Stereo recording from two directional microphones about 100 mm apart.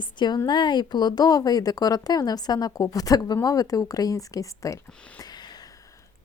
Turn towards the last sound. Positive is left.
turn(degrees=35)  # may be behind; listen again after turning